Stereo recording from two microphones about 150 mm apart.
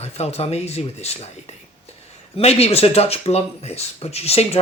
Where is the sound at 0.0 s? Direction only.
45° left (ahead or behind).